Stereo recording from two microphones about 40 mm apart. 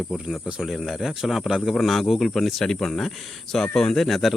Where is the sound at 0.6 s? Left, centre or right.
Centre.